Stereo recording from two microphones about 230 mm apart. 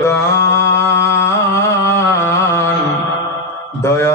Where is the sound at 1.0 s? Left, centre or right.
Centre.